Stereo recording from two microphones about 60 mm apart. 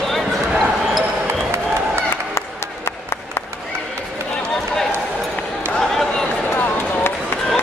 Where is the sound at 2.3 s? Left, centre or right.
Left.